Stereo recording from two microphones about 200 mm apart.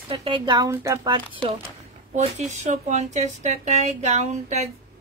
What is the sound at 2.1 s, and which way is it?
Speech, 35° right (ahead or behind).